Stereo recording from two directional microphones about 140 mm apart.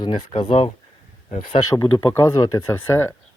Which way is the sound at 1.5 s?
25° left (ahead or behind).